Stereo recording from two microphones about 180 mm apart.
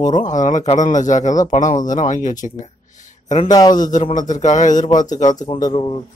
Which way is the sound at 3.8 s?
45° left (ahead or behind).